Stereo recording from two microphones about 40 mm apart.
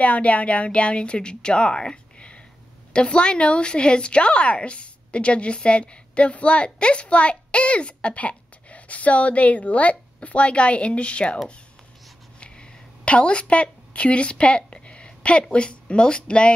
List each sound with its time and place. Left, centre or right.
0.0 s a woman's voice: left
12.4 s a sound: left
15.5 s a woman's voice: left